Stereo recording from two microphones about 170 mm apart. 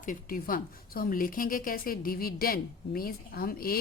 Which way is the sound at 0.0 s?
55° left (ahead or behind).